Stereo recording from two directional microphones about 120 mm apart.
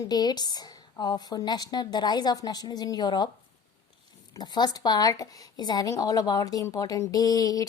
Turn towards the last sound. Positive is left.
turn(degrees=30)  # may be behind; listen again after turning